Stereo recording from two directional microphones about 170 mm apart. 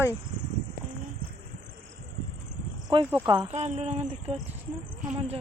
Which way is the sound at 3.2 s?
25° right (ahead or behind).